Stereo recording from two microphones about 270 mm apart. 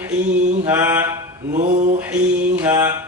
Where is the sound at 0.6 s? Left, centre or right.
Centre.